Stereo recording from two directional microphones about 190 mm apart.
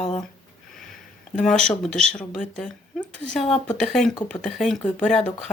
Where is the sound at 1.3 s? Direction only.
Centre (ahead or behind).